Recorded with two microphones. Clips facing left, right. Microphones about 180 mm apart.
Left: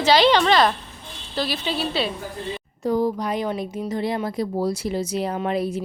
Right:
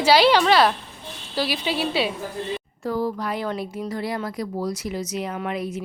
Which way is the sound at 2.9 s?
20° left (ahead or behind).